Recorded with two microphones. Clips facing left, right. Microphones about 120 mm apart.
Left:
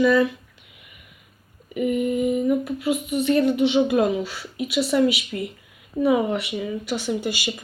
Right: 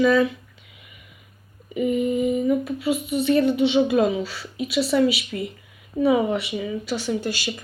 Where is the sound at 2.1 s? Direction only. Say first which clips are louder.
Even; centre (ahead or behind).